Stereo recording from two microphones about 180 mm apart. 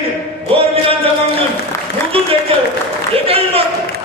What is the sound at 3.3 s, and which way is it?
Speech, 30° right (ahead or behind).